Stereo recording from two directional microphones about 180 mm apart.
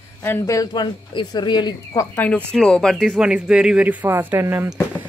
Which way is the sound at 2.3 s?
5° left (ahead or behind).